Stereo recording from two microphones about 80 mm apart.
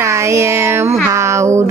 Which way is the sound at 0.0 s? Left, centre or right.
Right.